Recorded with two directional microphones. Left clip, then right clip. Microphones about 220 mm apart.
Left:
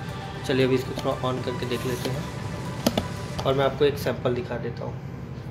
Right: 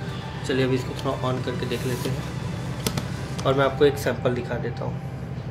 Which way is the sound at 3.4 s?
Centre (ahead or behind).